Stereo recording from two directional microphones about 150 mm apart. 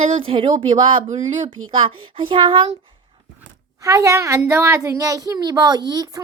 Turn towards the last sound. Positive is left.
turn(degrees=-25)  # may be behind; listen again after turning